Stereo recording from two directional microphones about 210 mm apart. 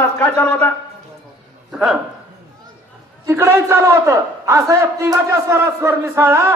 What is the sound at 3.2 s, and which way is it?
A man's voice, 10° right (ahead or behind).